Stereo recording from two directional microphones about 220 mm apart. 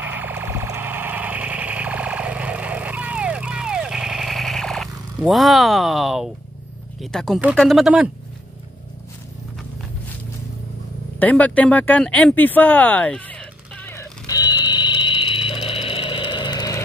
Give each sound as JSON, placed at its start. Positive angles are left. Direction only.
{"t": 0.0, "sound": "car alarm", "side_deg": -10}
{"t": 7.0, "sound": "speech", "side_deg": 0}
{"t": 11.1, "sound": "speech", "side_deg": 5}
{"t": 14.6, "sound": "vehicle", "side_deg": 20}